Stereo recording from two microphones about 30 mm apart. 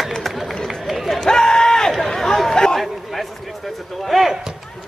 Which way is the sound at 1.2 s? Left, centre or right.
Left.